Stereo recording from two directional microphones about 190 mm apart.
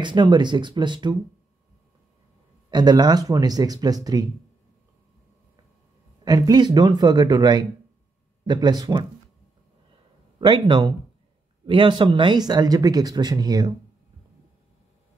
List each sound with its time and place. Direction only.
0.0 s speech: 25° right (ahead or behind)
2.7 s speech: 20° right (ahead or behind)
6.2 s speech: 20° right (ahead or behind)
10.4 s speech: 25° right (ahead or behind)